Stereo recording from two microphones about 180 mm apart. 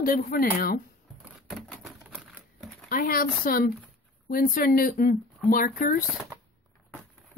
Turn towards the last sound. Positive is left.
turn(degrees=50)  # may be behind; listen again after turning